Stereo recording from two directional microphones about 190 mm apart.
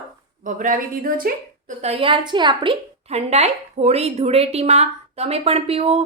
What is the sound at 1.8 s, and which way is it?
A woman's voice, 30° right (ahead or behind).